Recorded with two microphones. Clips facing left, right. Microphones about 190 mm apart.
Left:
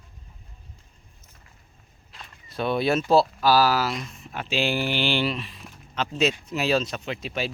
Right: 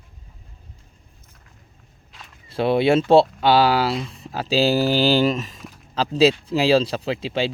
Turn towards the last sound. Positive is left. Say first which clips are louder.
# right 6 dB
turn(degrees=-30)  # may be behind; listen again after turning